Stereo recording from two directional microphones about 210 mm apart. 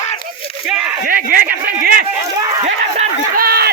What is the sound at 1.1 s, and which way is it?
Speech, 45° right (ahead or behind).